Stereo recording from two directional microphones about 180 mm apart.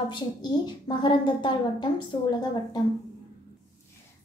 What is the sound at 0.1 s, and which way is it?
A woman's voice, 25° left (ahead or behind).